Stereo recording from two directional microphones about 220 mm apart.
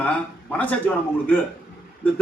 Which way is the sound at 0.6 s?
5° left (ahead or behind).